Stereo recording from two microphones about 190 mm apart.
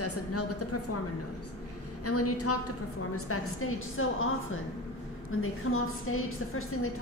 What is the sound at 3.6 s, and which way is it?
A woman's voice, 90° left.